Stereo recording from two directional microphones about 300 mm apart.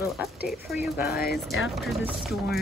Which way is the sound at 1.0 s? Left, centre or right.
Left.